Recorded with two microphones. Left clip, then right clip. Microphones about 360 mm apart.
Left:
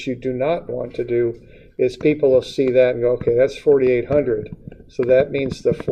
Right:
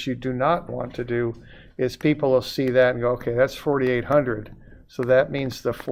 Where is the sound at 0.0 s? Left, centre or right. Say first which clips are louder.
Left 2 dB; right.